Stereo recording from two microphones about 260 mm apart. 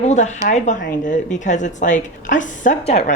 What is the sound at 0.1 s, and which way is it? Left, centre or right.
A woman's voice, left.